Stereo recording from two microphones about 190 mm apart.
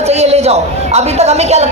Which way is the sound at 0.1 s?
35° right (ahead or behind).